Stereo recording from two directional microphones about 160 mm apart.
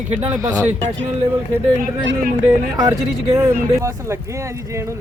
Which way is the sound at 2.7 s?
20° right (ahead or behind).